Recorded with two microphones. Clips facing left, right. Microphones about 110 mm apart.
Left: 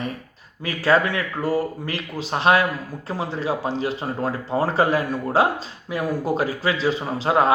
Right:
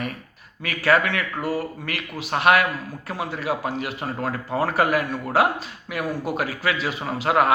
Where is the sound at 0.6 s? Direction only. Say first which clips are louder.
Left 1 dB; 30° left (ahead or behind).